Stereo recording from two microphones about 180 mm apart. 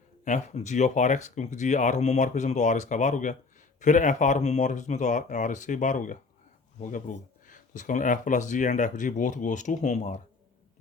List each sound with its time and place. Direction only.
0.3 s speech: 40° left (ahead or behind)